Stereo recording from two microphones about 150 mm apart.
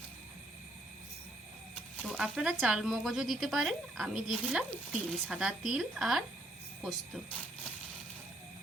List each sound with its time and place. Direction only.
2.0 s speech: 5° right (ahead or behind)